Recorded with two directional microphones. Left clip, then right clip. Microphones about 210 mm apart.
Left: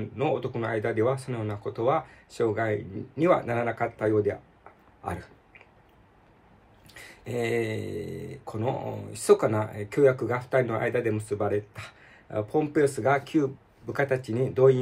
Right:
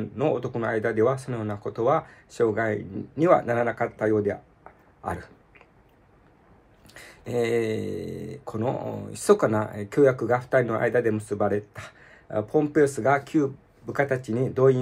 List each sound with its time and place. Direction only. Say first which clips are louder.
0.0 s speech: right 2 dB; 15° right (ahead or behind)
6.9 s a sound: right 4 dB; 15° right (ahead or behind)
8.2 s speech: right 3 dB; 15° right (ahead or behind)